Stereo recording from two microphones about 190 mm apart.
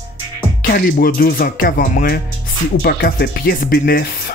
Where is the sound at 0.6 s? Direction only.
50° left (ahead or behind).